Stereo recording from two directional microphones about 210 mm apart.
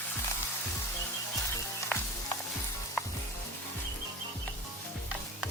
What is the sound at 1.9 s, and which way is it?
Sizzle, 10° left (ahead or behind).